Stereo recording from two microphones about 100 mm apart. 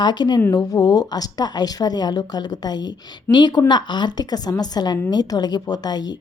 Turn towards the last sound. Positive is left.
turn(degrees=45)  # may be behind; listen again after turning